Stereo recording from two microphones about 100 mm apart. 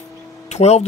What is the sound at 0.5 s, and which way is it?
Speech, 90° left.